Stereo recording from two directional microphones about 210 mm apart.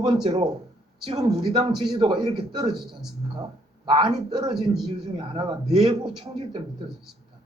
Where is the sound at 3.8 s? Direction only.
25° right (ahead or behind).